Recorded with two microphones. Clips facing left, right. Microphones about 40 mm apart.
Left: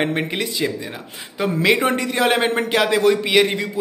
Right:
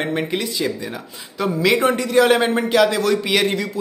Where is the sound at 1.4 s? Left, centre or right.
Left.